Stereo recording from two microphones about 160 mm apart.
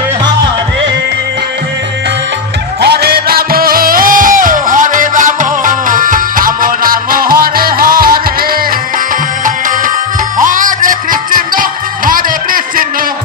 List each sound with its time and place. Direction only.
2.8 s music: 85° right; by 8.5 s 65° right (ahead or behind)
10.4 s music: 55° right (ahead or behind)